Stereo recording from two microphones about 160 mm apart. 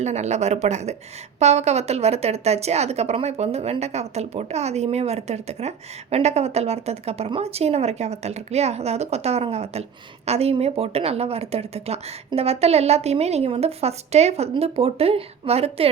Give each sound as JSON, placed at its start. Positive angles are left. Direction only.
{"t": 0.0, "sound": "a woman's voice", "side_deg": -45}